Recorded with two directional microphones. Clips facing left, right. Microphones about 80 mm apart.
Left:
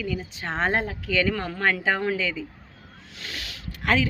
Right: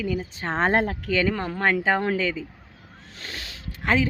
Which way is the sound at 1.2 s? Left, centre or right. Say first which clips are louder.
Even; right.